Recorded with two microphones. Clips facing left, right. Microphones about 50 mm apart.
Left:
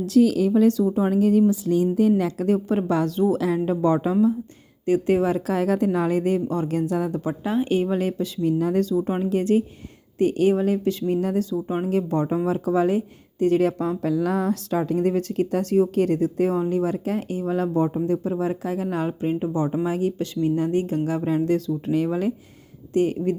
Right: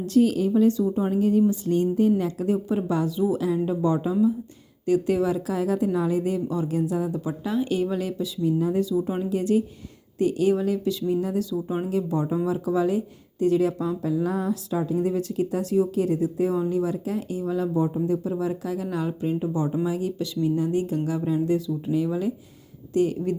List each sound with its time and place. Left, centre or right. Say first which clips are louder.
0.5 s a woman's voice: left 2 dB; left
4.9 s speech: left 2 dB; left
7.3 s speech: left 3 dB; left
9.0 s speech: left 3 dB; left
11.9 s speech: left 4 dB; left
14.0 s speech: left 3 dB; left
16.6 s speech: left 2 dB; left
21.2 s speech: left 1 dB; left
23.0 s speech: left 2 dB; left